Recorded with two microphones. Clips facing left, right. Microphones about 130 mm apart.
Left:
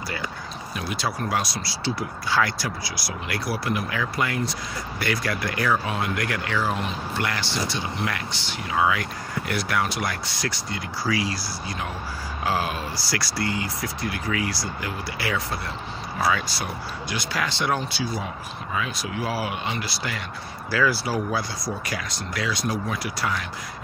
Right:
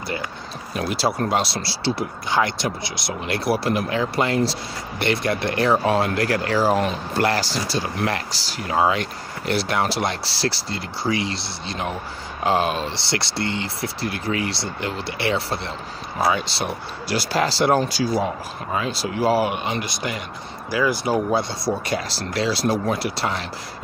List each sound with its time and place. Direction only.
0.7 s speech: 30° right (ahead or behind)